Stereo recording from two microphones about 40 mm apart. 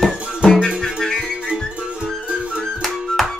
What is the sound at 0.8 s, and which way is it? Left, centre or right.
Music, centre.